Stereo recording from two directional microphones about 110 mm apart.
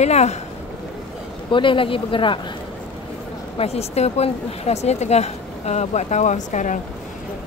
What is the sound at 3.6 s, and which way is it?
A woman's voice, 75° left (ahead or behind).